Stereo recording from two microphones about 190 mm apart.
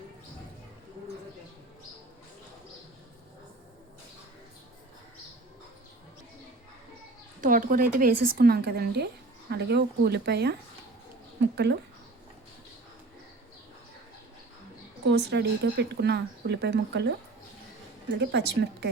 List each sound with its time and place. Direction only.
7.4 s a woman's voice: 45° right (ahead or behind); by 11.8 s 65° right (ahead or behind)
15.0 s speech: 65° right (ahead or behind)
18.2 s speech: 65° right (ahead or behind)